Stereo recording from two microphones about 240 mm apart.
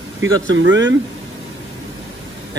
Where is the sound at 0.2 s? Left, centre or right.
Right.